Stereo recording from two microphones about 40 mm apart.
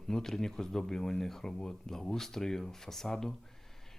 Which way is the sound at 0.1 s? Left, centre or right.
Centre.